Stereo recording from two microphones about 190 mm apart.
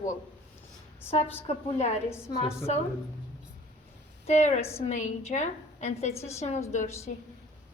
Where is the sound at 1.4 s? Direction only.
30° left (ahead or behind).